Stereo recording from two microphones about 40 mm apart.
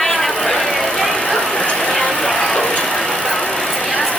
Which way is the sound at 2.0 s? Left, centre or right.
Centre.